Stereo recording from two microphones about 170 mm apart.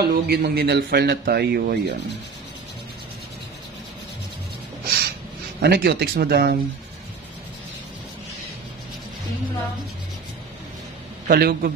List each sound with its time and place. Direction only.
0.0 s speech: 70° right (ahead or behind)
4.8 s a sound: 65° right (ahead or behind)
5.6 s speech: 70° right (ahead or behind)
11.2 s a man's voice: 65° right (ahead or behind)